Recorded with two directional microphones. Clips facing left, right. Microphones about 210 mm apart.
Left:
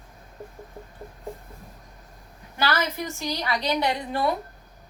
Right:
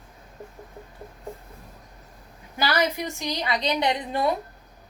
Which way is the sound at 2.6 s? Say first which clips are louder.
Right 2 dB; 15° right (ahead or behind).